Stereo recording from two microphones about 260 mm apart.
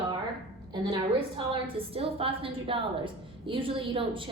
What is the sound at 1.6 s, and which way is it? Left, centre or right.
A woman's voice, right.